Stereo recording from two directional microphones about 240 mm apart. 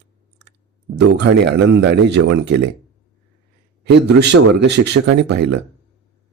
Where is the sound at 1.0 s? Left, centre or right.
Right.